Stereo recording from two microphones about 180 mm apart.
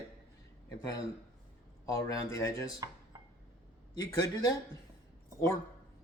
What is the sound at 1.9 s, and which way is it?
Speech, 15° left (ahead or behind).